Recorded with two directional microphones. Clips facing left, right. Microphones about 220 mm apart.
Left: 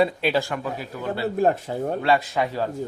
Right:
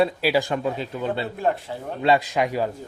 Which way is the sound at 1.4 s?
45° left (ahead or behind).